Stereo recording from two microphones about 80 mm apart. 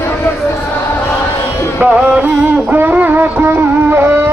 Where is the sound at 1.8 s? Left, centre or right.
Centre.